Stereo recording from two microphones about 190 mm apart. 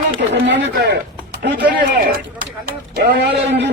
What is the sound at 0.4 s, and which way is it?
Speech, 70° right (ahead or behind).